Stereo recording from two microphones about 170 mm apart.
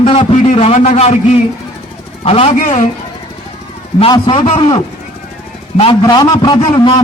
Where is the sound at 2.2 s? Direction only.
35° left (ahead or behind).